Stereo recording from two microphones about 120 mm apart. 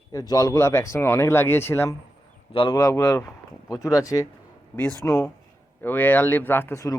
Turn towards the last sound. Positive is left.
turn(degrees=20)  # may be behind; listen again after turning